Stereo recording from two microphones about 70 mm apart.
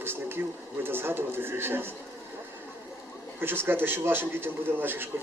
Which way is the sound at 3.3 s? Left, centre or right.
Right.